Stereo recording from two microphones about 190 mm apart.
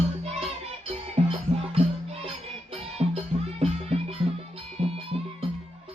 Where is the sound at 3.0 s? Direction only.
30° right (ahead or behind).